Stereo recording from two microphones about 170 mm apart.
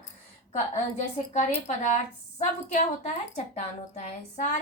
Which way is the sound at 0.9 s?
40° left (ahead or behind).